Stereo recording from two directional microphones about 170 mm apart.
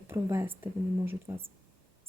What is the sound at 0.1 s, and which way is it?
Speech, 15° right (ahead or behind).